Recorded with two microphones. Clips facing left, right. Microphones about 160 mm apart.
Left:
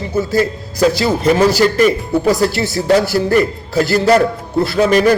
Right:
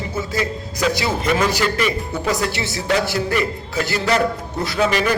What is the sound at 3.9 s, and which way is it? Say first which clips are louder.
Speech: left 7 dB; 40° left (ahead or behind).